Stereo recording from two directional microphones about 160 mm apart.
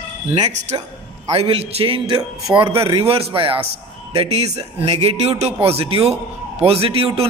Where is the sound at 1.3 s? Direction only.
40° right (ahead or behind).